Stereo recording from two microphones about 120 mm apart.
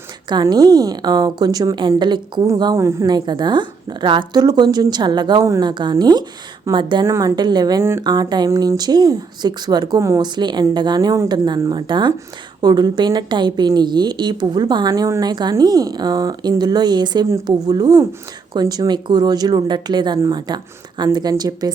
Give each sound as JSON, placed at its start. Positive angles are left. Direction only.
{"t": 0.4, "sound": "a woman's voice", "side_deg": -30}
{"t": 2.7, "sound": "speech", "side_deg": -25}
{"t": 3.1, "sound": "a woman's voice", "side_deg": -35}
{"t": 5.4, "sound": "speech", "side_deg": -25}
{"t": 5.6, "sound": "a woman's voice", "side_deg": -40}
{"t": 7.0, "sound": "a woman's voice", "side_deg": -25}
{"t": 7.8, "sound": "speech", "side_deg": -20}
{"t": 8.0, "sound": "a woman's voice", "side_deg": -35}